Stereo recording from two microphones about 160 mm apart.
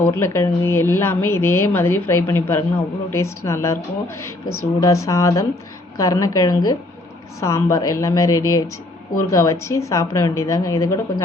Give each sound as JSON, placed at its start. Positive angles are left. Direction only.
{"t": 0.0, "sound": "a woman's voice", "side_deg": 15}